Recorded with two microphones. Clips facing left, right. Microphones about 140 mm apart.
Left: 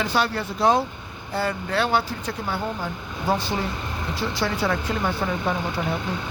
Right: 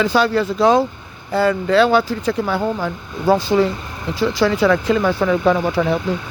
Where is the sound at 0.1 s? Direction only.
90° right.